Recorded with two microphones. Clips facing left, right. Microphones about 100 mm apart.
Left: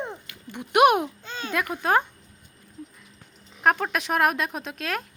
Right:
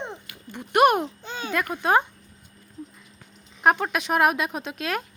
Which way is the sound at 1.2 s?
15° right (ahead or behind).